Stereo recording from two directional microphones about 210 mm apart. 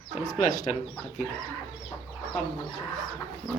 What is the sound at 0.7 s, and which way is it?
Speech, 30° left (ahead or behind).